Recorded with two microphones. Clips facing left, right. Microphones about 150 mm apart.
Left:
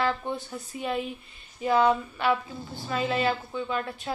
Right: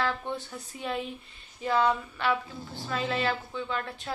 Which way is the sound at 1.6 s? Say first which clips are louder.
Left 3 dB; 15° left (ahead or behind).